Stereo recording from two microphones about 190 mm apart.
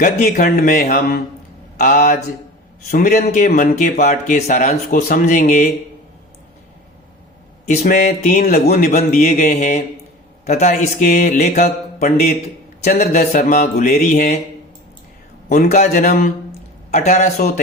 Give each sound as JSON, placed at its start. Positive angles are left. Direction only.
{"t": 0.0, "sound": "speech", "side_deg": 45}
{"t": 7.8, "sound": "speech", "side_deg": 45}
{"t": 12.9, "sound": "speech", "side_deg": 50}
{"t": 15.4, "sound": "speech", "side_deg": 50}
{"t": 16.9, "sound": "speech", "side_deg": 35}